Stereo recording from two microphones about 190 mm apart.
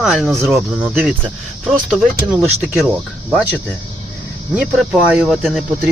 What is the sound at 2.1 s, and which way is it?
Speech, 10° right (ahead or behind).